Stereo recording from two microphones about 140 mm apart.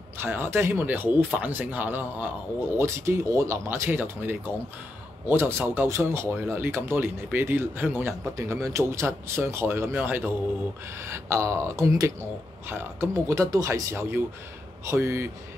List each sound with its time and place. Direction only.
0.2 s speech: 15° right (ahead or behind)